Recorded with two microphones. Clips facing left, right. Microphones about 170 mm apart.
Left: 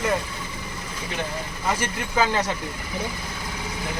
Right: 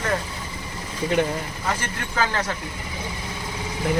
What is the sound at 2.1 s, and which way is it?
Speech, 15° left (ahead or behind).